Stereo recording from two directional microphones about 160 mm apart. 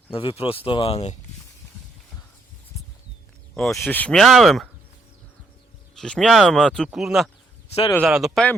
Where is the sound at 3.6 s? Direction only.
Centre (ahead or behind).